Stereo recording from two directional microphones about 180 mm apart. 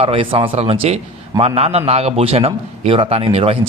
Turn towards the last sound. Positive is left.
turn(degrees=-30)  # may be behind; listen again after turning